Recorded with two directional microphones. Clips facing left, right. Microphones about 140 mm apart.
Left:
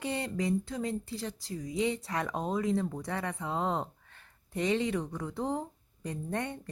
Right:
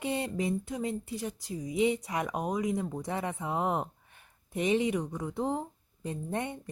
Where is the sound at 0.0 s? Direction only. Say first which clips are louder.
Right 1 dB; 20° right (ahead or behind).